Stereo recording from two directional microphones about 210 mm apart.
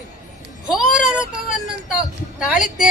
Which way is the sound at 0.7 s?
5° right (ahead or behind).